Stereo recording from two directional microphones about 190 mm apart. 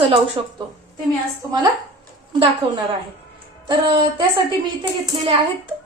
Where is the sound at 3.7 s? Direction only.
25° right (ahead or behind).